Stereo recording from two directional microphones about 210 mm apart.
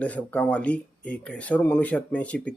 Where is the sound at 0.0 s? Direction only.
5° left (ahead or behind).